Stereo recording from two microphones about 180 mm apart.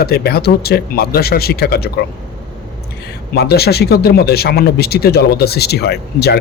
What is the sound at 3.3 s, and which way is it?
A man's voice, 60° left (ahead or behind).